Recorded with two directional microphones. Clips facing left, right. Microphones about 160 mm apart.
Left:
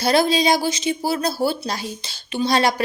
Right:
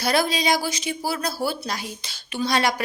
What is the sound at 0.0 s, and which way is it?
Speech, 30° left (ahead or behind).